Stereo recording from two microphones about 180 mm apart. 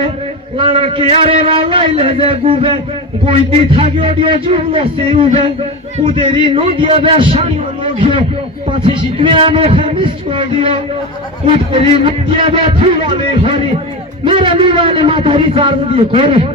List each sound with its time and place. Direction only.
0.6 s a man's voice: 30° right (ahead or behind)